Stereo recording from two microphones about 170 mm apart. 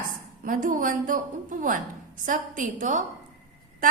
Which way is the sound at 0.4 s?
50° right (ahead or behind).